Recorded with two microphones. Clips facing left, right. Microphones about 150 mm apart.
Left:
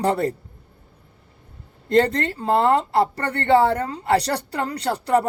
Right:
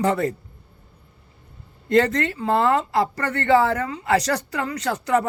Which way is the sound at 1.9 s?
30° left (ahead or behind).